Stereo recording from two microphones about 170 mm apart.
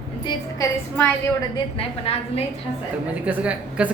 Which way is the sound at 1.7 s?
35° left (ahead or behind).